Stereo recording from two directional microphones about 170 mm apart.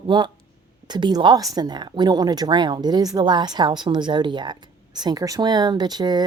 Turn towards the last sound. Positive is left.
turn(degrees=-25)  # may be behind; listen again after turning